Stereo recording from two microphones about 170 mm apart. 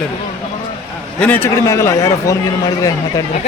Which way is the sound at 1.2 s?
15° left (ahead or behind).